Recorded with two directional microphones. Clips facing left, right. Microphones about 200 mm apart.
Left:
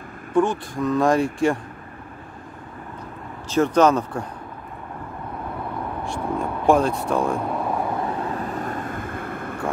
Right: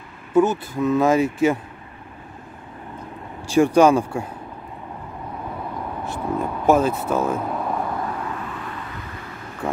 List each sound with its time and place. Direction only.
0.3 s speech: 5° right (ahead or behind)
3.4 s speech: 10° right (ahead or behind)
6.0 s vehicle: 5° right (ahead or behind)
8.2 s vehicle: 35° left (ahead or behind); by 9.6 s 55° left (ahead or behind)